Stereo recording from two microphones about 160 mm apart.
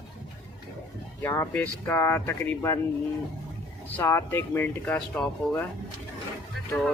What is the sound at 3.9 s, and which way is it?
Speech, 15° left (ahead or behind).